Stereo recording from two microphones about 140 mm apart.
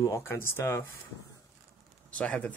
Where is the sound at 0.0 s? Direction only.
20° left (ahead or behind).